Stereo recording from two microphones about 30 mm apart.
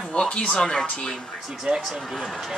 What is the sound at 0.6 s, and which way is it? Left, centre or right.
Speech, left.